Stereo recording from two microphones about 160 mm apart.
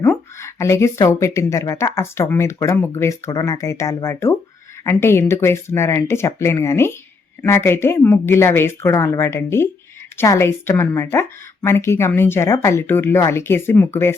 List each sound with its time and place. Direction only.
0.0 s speech: 15° left (ahead or behind)